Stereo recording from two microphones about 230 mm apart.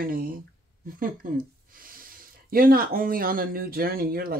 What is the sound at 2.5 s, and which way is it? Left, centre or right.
Speech, right.